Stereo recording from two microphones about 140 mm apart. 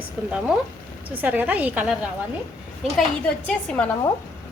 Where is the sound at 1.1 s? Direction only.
10° right (ahead or behind).